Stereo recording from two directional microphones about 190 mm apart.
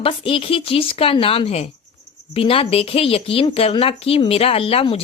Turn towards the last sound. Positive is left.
turn(degrees=30)  # may be behind; listen again after turning